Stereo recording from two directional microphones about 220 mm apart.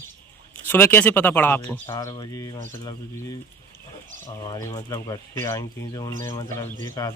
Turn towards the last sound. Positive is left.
turn(degrees=15)  # may be behind; listen again after turning